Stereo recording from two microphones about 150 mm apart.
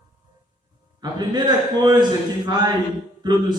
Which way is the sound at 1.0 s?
30° right (ahead or behind).